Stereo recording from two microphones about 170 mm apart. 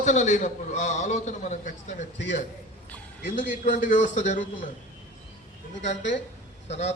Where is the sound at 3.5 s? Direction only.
50° left (ahead or behind).